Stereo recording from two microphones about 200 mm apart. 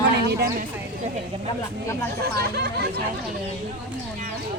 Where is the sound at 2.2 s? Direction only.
55° right (ahead or behind).